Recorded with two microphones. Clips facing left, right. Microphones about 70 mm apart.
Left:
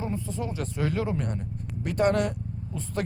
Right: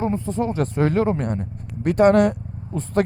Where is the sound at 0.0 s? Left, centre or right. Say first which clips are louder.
Right 9 dB; right.